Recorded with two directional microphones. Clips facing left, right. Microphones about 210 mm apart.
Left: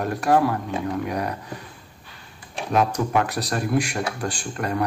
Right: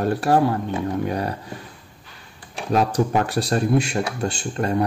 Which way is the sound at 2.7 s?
30° right (ahead or behind).